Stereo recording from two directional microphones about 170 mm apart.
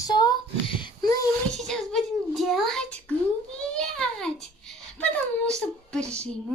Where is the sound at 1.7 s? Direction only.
Centre (ahead or behind).